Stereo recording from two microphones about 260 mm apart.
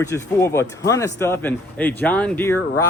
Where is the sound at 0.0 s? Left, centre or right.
Centre.